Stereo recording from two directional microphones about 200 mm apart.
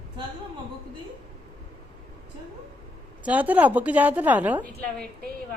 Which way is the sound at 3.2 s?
10° right (ahead or behind).